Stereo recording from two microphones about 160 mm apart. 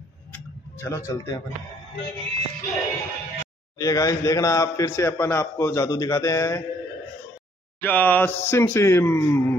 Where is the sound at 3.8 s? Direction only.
20° left (ahead or behind).